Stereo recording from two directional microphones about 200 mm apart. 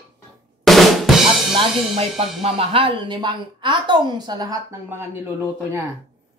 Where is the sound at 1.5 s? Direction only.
25° right (ahead or behind).